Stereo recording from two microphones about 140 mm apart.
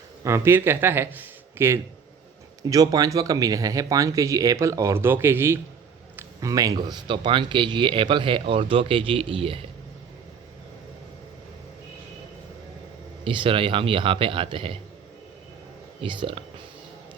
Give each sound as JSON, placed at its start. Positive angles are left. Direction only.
{"t": 0.3, "sound": "a man's voice", "side_deg": -20}
{"t": 13.2, "sound": "a man's voice", "side_deg": -35}
{"t": 16.0, "sound": "a man's voice", "side_deg": -40}